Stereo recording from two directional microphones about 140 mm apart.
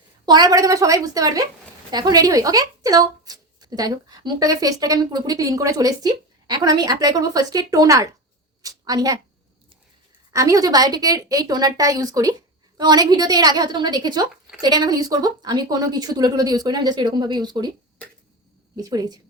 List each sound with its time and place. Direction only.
0.3 s a woman's voice: 30° right (ahead or behind)
10.3 s speech: 25° right (ahead or behind)
18.8 s speech: 25° right (ahead or behind)